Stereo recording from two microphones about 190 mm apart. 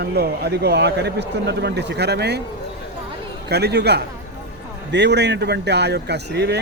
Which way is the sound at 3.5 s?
60° right (ahead or behind).